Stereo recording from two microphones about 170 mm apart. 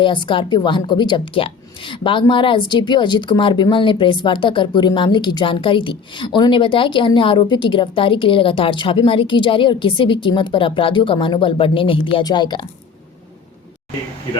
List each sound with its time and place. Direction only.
0.0 s a woman's voice: 30° left (ahead or behind)